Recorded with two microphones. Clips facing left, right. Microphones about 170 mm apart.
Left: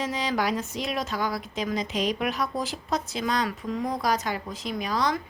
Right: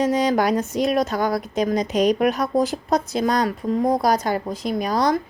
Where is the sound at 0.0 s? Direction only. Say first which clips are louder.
Right 8 dB; 45° right (ahead or behind).